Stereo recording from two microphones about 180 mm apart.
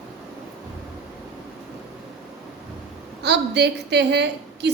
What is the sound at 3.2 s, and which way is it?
A woman's voice, 70° right (ahead or behind).